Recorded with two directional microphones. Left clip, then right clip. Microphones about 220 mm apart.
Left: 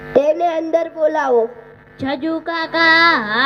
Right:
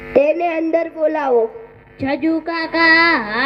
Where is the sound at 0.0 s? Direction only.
35° left (ahead or behind).